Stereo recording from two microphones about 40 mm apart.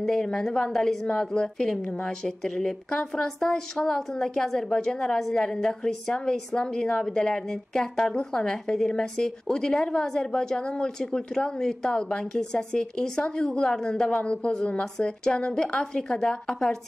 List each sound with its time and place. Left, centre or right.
0.0 s a woman's voice: centre